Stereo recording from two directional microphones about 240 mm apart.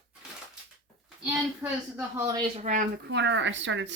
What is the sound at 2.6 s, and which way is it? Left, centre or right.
A woman's voice, right.